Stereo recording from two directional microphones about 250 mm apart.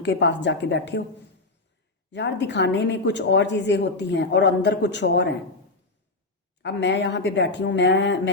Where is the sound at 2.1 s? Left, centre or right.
Left.